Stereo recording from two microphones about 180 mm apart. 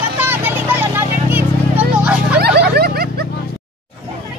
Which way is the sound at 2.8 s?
60° right (ahead or behind).